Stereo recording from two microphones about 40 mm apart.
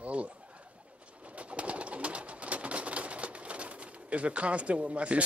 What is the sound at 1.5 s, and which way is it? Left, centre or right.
Bird, right.